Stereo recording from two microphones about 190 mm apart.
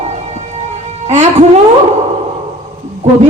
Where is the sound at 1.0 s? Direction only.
35° right (ahead or behind).